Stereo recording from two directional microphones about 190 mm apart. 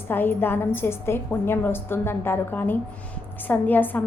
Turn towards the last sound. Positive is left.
turn(degrees=10)  # may be behind; listen again after turning